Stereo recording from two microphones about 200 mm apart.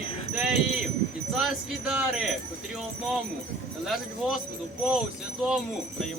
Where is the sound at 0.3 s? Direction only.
5° right (ahead or behind).